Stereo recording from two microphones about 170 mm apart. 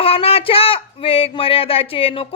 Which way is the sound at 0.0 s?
35° left (ahead or behind).